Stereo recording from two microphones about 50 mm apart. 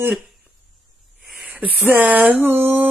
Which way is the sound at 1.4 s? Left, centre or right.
Right.